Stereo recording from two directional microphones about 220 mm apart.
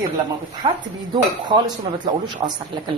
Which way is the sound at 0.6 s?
25° right (ahead or behind).